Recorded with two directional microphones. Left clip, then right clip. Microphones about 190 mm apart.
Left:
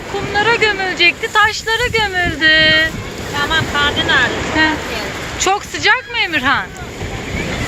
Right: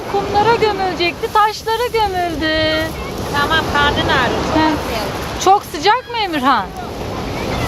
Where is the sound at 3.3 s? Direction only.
40° left (ahead or behind).